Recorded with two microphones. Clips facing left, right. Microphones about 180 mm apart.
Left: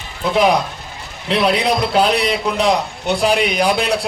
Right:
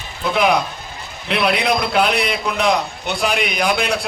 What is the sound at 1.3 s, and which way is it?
A man's voice, 35° left (ahead or behind).